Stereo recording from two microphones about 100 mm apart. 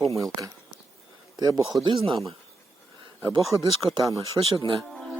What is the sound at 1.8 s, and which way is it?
Speech, 55° right (ahead or behind).